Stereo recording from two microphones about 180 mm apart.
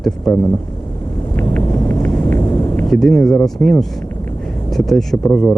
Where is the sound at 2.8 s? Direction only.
Centre (ahead or behind).